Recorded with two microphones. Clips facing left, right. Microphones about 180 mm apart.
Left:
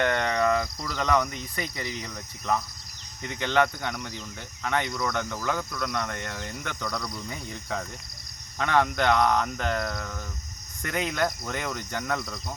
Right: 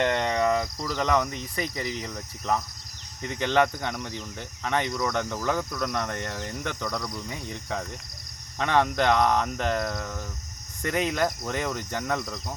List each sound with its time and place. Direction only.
0.0 s speech: 25° right (ahead or behind)
5.8 s speech: 40° right (ahead or behind)
6.8 s speech: 15° right (ahead or behind)